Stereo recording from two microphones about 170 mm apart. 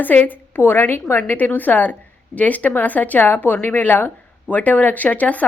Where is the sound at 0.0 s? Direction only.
10° left (ahead or behind).